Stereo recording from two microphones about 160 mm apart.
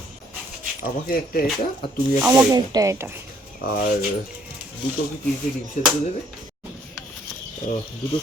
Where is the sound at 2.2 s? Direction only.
10° right (ahead or behind).